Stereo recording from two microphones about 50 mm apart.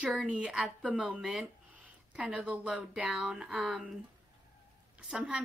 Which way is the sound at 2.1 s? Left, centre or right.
Right.